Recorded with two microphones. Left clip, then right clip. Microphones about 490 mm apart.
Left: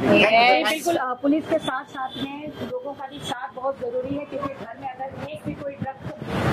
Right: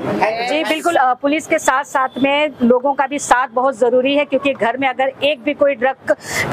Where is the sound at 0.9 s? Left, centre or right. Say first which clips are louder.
Right 9 dB; centre.